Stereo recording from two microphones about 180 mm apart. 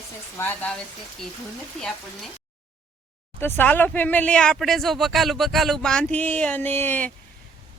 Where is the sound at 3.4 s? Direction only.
10° left (ahead or behind).